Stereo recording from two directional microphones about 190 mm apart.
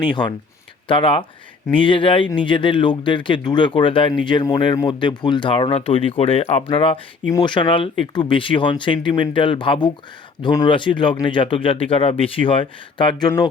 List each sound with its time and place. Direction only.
0.0 s speech: 25° left (ahead or behind)